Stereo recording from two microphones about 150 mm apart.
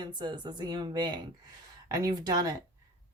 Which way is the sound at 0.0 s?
30° right (ahead or behind).